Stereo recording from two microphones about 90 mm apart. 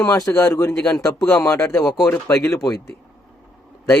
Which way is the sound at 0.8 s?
10° left (ahead or behind).